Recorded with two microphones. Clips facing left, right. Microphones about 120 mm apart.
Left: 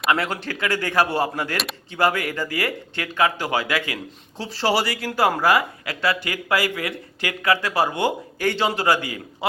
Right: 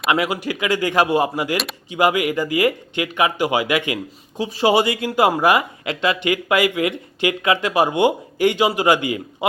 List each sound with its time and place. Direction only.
0.1 s speech: 15° right (ahead or behind)